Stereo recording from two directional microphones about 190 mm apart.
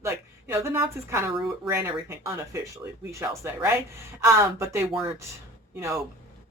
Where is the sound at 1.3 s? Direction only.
Centre (ahead or behind).